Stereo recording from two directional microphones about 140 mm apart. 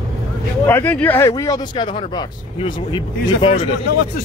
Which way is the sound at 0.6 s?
15° left (ahead or behind).